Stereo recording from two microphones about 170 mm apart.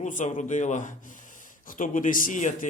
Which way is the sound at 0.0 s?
45° left (ahead or behind).